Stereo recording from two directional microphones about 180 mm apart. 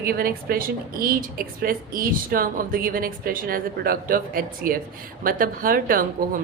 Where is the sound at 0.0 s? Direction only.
55° right (ahead or behind).